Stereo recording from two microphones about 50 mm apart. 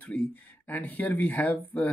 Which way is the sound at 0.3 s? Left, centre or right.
Left.